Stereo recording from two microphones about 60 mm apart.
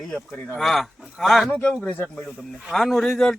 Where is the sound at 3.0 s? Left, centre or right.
Centre.